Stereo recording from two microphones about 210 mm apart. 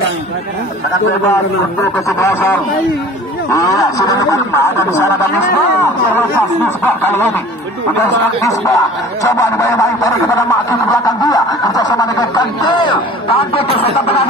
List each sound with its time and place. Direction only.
3.5 s speech: 15° left (ahead or behind)
6.8 s a man's voice: 10° left (ahead or behind); by 14.2 s 30° left (ahead or behind)